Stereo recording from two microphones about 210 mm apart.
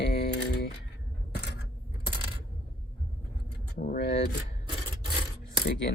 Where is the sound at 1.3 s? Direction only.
50° left (ahead or behind).